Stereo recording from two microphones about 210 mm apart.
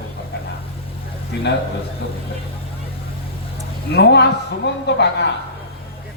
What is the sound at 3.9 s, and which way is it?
Speech, 55° left (ahead or behind).